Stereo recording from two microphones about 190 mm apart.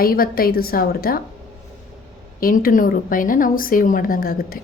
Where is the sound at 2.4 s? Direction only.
50° left (ahead or behind).